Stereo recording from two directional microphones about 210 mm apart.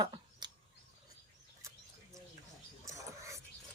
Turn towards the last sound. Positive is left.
turn(degrees=-15)  # may be behind; listen again after turning